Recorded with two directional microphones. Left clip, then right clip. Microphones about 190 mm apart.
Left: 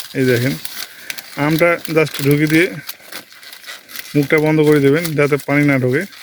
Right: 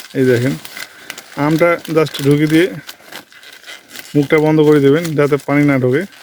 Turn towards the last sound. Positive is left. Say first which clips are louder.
# right 2 dB
turn(degrees=-10)  # may be behind; listen again after turning